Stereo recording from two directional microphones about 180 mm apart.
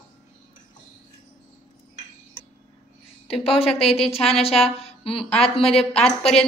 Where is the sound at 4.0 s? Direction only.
35° left (ahead or behind).